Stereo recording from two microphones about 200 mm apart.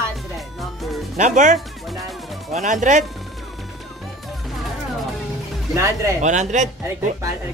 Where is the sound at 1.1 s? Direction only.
40° right (ahead or behind).